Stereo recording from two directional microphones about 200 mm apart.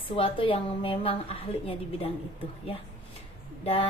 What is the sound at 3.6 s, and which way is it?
Speech, 30° left (ahead or behind).